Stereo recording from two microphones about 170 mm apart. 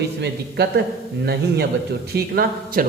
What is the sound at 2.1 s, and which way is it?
Speech, 65° right (ahead or behind).